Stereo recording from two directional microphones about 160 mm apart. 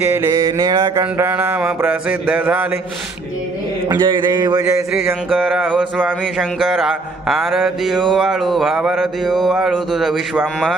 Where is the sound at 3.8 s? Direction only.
25° right (ahead or behind).